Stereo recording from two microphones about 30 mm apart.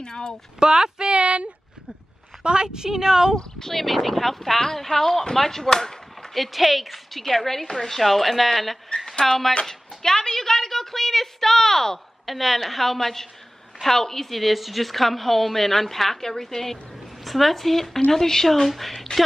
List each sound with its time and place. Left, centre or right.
0.0 s speech: left
0.6 s speech: right
1.1 s speech: right
2.4 s a woman's voice: right
2.9 s speech: centre
3.7 s a woman's voice: centre
6.3 s a woman's voice: centre
7.1 s a woman's voice: centre
9.7 s a woman's voice: left
12.3 s a woman's voice: centre
17.2 s a woman's voice: centre